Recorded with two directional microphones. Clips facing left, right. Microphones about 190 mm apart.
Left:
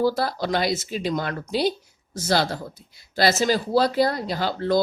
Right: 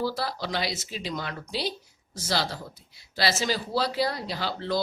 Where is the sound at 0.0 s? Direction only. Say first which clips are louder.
Left 7 dB; 50° left (ahead or behind).